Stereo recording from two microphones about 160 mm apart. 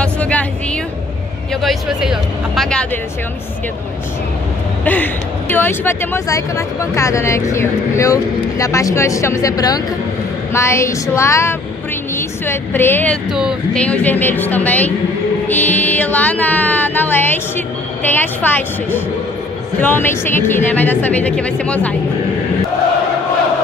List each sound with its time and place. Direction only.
0.0 s a sound: 10° left (ahead or behind)
1.5 s speech: centre (ahead or behind)
4.8 s a woman's voice: 10° left (ahead or behind)
13.3 s speech: 5° right (ahead or behind)
13.7 s speech: 10° left (ahead or behind)